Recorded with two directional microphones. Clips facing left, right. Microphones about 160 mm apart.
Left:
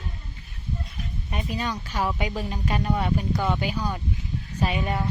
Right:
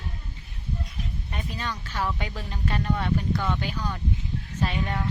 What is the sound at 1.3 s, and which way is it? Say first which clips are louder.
Speech: left 5 dB; 15° left (ahead or behind).